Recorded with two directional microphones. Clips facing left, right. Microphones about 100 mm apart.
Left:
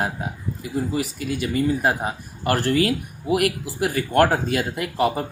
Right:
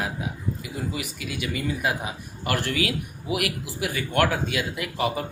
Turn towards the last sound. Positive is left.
turn(degrees=45)  # may be behind; listen again after turning